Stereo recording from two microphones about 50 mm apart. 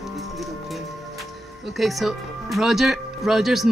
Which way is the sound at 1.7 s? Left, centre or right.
Centre.